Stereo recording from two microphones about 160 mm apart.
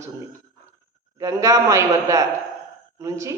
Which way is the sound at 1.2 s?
20° right (ahead or behind).